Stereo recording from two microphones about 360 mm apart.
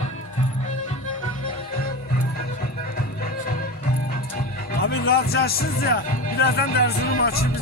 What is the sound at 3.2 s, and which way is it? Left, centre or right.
Music, left.